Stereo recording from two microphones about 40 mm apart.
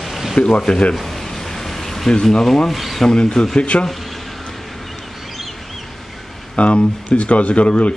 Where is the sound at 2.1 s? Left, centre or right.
Centre.